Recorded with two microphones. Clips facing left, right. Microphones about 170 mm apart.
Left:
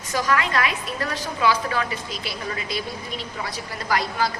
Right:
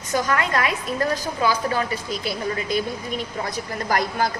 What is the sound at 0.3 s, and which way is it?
A woman's voice, 45° right (ahead or behind).